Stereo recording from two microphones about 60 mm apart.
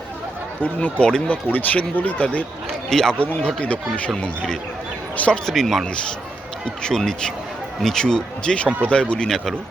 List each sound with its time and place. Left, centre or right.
0.6 s speech: left
1.5 s speech: left
2.9 s speech: centre
3.4 s speech: left
5.1 s speech: left
5.5 s speech: centre
6.8 s speech: centre